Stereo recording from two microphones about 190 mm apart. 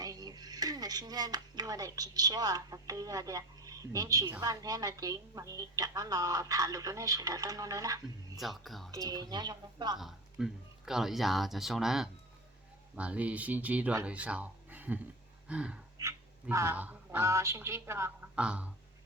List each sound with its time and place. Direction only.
0.0 s speech: 20° right (ahead or behind)
8.4 s speech: centre (ahead or behind)
8.9 s speech: 20° right (ahead or behind)
10.0 s speech: centre (ahead or behind)